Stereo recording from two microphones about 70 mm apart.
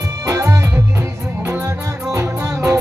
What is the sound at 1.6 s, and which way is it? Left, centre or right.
Music, right.